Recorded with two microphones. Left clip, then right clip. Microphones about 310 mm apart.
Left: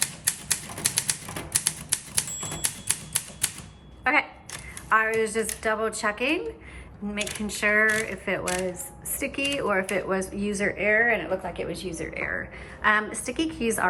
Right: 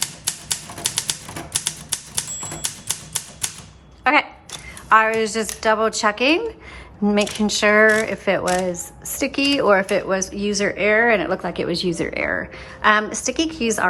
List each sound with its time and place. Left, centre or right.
0.0 s typewriter: centre
4.0 s speech: centre